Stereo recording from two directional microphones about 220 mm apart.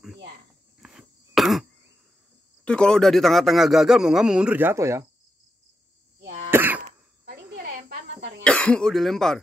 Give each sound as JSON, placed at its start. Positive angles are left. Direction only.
{"t": 0.7, "sound": "cough", "side_deg": 0}
{"t": 2.6, "sound": "speech", "side_deg": 5}
{"t": 6.5, "sound": "cough", "side_deg": -10}
{"t": 7.2, "sound": "a sound", "side_deg": -45}
{"t": 8.5, "sound": "speech", "side_deg": 5}